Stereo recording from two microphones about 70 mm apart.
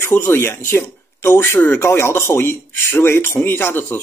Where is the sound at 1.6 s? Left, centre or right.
Left.